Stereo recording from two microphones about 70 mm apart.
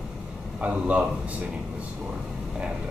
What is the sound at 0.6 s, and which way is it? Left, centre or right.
Speech, centre.